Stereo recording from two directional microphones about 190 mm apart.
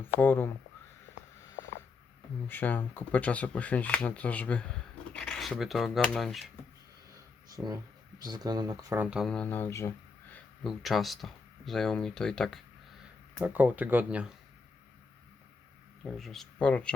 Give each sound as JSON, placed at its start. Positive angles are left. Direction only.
{"t": 0.0, "sound": "speech", "side_deg": 10}
{"t": 2.5, "sound": "speech", "side_deg": 10}
{"t": 7.5, "sound": "speech", "side_deg": -20}
{"t": 9.0, "sound": "speech", "side_deg": 0}
{"t": 10.3, "sound": "speech", "side_deg": 0}
{"t": 13.4, "sound": "speech", "side_deg": -10}
{"t": 16.0, "sound": "speech", "side_deg": 0}